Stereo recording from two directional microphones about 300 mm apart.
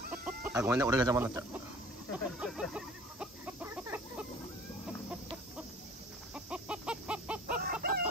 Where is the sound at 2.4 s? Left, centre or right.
Centre.